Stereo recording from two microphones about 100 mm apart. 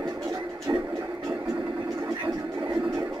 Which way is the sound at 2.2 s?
40° right (ahead or behind).